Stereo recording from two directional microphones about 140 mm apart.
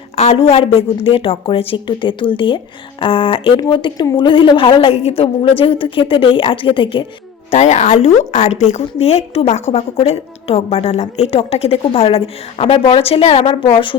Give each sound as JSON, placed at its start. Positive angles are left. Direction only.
{"t": 0.2, "sound": "a woman's voice", "side_deg": 45}
{"t": 7.5, "sound": "a woman's voice", "side_deg": 55}